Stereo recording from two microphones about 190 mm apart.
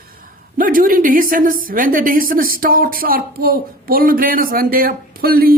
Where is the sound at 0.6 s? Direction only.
45° right (ahead or behind).